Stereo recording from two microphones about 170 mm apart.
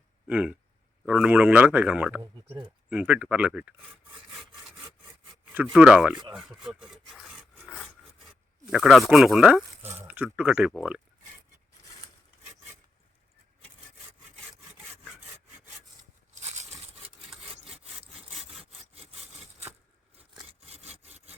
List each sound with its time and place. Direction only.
0.3 s speech: 5° right (ahead or behind)
5.7 s speech: 5° right (ahead or behind)
6.3 s rub: centre (ahead or behind)
8.7 s speech: centre (ahead or behind)
9.8 s speech: 40° right (ahead or behind)
10.1 s speech: 10° right (ahead or behind)
16.3 s a sound: 40° right (ahead or behind)
17.3 s sawing: centre (ahead or behind)
18.0 s sawing: 35° right (ahead or behind)